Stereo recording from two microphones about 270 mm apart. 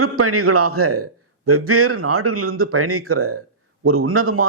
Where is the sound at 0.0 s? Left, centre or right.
Right.